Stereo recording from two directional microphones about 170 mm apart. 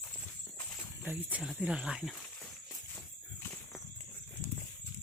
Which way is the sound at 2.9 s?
15° left (ahead or behind).